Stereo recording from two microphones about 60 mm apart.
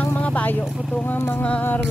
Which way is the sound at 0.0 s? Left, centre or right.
Left.